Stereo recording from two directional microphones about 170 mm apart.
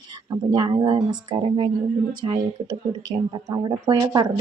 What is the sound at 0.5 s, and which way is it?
Speech, 25° right (ahead or behind).